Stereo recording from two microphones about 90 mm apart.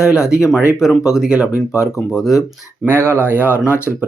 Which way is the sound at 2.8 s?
25° right (ahead or behind).